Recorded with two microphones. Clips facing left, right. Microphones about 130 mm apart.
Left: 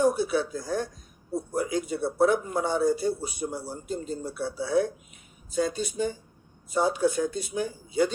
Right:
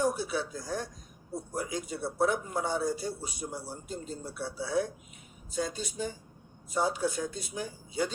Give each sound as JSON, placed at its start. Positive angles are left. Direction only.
{"t": 0.0, "sound": "a man's voice", "side_deg": 60}